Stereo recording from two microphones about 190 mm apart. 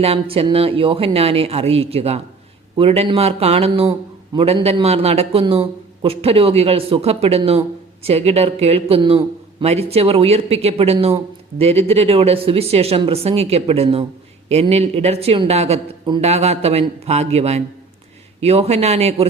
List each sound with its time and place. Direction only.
0.0 s a man's voice: 30° right (ahead or behind)